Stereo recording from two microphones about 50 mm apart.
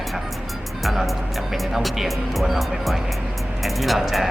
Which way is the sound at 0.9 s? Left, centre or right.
Centre.